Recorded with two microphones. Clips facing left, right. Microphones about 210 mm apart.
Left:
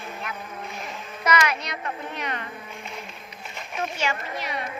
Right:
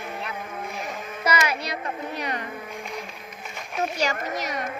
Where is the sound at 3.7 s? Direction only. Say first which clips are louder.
Right 3 dB; 40° right (ahead or behind).